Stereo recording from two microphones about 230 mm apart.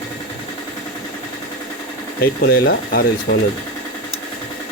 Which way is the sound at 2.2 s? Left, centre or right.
Left.